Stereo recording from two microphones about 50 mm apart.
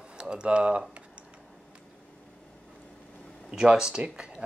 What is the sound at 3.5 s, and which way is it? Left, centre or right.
Speech, centre.